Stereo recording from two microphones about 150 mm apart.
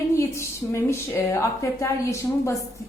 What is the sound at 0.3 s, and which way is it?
A woman's voice, 20° left (ahead or behind).